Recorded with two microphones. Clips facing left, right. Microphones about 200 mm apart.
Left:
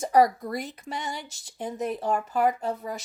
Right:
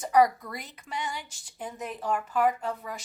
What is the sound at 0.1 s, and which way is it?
A woman's voice, 40° left (ahead or behind).